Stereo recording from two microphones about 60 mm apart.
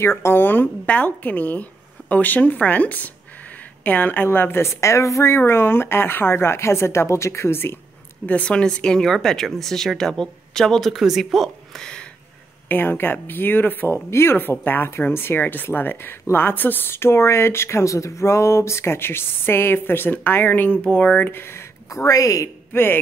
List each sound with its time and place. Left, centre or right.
0.0 s speech: left
0.8 s speech: left
5.4 s speech: left
8.3 s speech: left; by 11.8 s centre
11.8 s a sound: centre
12.6 s speech: left
13.9 s speech: left
21.2 s speech: left
21.8 s speech: left